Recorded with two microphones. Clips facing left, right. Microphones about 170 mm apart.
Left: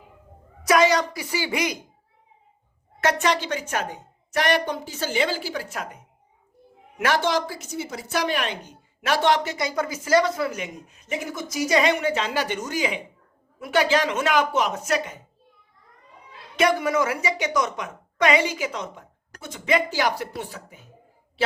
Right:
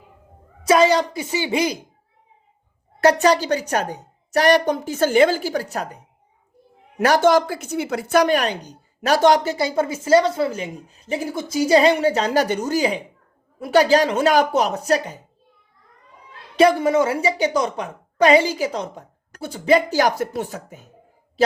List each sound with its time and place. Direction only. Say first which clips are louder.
0.6 s a woman's voice: right 3 dB; 30° right (ahead or behind)
3.0 s speech: right 7 dB; 35° right (ahead or behind)
7.0 s speech: right 7 dB; 45° right (ahead or behind)
16.6 s speech: right 6 dB; 30° right (ahead or behind)